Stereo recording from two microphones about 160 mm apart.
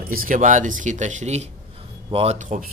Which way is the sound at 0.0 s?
65° right (ahead or behind).